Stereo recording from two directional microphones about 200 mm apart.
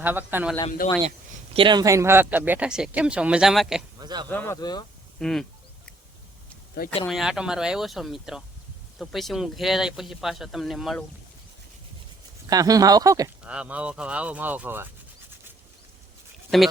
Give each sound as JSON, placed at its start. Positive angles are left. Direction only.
{"t": 0.0, "sound": "speech", "side_deg": -10}
{"t": 0.8, "sound": "speech", "side_deg": 45}
{"t": 1.5, "sound": "speech", "side_deg": -25}
{"t": 4.0, "sound": "speech", "side_deg": -20}
{"t": 4.3, "sound": "speech", "side_deg": 10}
{"t": 5.2, "sound": "speech", "side_deg": 0}
{"t": 7.1, "sound": "speech", "side_deg": 0}
{"t": 12.5, "sound": "speech", "side_deg": -20}
{"t": 13.4, "sound": "speech", "side_deg": -5}
{"t": 16.5, "sound": "speech", "side_deg": 0}